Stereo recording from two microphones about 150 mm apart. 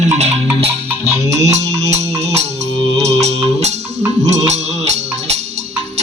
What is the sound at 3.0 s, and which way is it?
Music, 45° right (ahead or behind).